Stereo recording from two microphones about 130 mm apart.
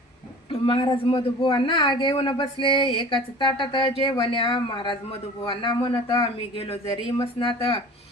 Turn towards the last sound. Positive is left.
turn(degrees=45)  # may be behind; listen again after turning